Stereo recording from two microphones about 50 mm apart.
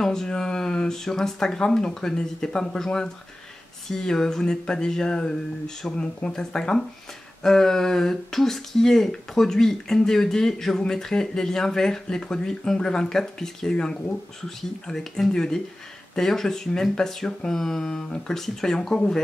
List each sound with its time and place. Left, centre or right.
0.0 s speech: centre